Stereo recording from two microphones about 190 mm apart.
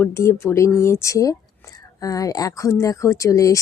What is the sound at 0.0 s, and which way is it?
Speech, 15° left (ahead or behind).